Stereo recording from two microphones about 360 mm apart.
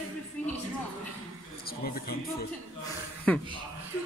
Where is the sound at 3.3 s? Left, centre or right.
Centre.